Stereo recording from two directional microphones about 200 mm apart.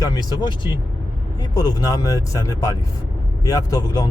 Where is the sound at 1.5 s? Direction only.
20° left (ahead or behind).